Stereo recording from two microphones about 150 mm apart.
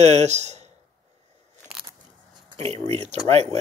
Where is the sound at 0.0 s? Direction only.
50° right (ahead or behind).